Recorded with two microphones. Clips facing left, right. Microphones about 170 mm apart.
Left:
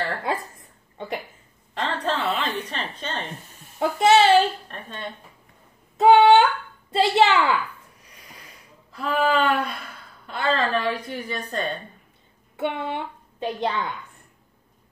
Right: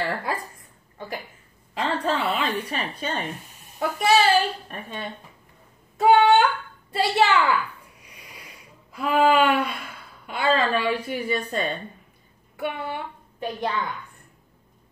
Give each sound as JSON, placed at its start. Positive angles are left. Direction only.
{"t": 0.3, "sound": "a sound", "side_deg": 25}
{"t": 0.9, "sound": "speech", "side_deg": 20}
{"t": 1.8, "sound": "a woman's voice", "side_deg": -10}
{"t": 3.8, "sound": "a woman's voice", "side_deg": 25}
{"t": 4.6, "sound": "a woman's voice", "side_deg": -10}
{"t": 5.9, "sound": "a child's voice", "side_deg": 20}
{"t": 8.0, "sound": "a sound", "side_deg": -10}
{"t": 8.9, "sound": "a woman's voice", "side_deg": -10}
{"t": 12.5, "sound": "a woman's voice", "side_deg": 25}